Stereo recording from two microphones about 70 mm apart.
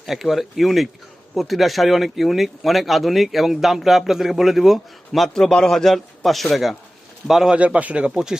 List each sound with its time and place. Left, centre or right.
0.0 s speech: centre
7.5 s speech: centre